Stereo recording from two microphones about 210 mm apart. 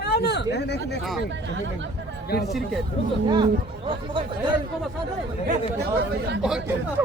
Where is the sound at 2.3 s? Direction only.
50° left (ahead or behind).